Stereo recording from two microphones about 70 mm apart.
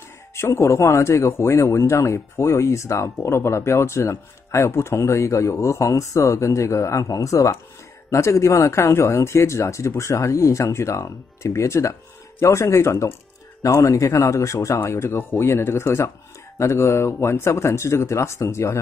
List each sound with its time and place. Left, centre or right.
0.4 s speech: left